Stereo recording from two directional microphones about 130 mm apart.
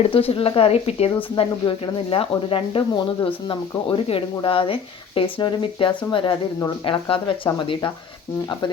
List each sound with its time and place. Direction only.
0.1 s speech: 45° left (ahead or behind)